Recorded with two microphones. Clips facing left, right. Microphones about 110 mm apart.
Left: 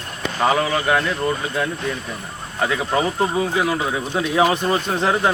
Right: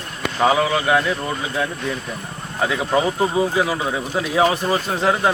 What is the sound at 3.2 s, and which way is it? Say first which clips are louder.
Speech: right 1 dB; 5° right (ahead or behind).